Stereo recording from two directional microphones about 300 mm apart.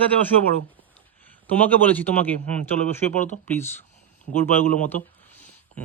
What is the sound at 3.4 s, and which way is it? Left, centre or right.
Speech, centre.